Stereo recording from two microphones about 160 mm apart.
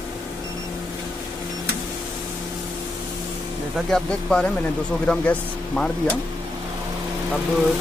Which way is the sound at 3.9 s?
5° left (ahead or behind).